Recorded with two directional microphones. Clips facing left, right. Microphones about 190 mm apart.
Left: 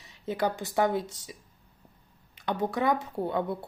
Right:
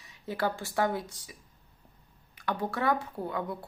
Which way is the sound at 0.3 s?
20° left (ahead or behind).